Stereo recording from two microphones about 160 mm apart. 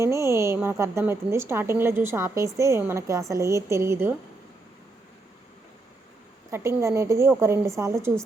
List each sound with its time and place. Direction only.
0.0 s a woman's voice: 15° right (ahead or behind)
6.5 s a woman's voice: 15° right (ahead or behind)